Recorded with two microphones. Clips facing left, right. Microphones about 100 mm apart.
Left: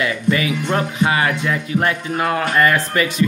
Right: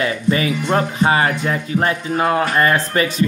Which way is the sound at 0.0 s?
35° right (ahead or behind).